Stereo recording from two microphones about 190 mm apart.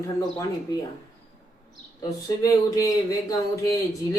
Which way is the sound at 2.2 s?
20° left (ahead or behind).